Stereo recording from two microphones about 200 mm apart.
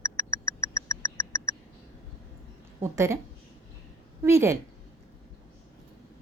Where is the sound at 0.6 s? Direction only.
15° left (ahead or behind).